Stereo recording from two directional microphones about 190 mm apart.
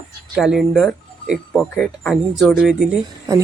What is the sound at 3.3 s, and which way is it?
Speech, 20° right (ahead or behind).